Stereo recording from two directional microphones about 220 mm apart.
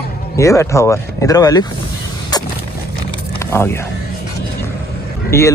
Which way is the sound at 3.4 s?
10° left (ahead or behind).